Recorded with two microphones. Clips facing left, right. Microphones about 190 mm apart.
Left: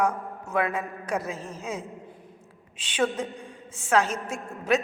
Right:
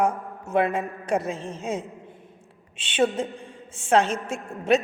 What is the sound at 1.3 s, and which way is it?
Speech, 30° right (ahead or behind).